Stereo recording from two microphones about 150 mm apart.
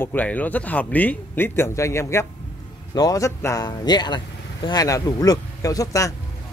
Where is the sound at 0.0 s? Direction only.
10° left (ahead or behind).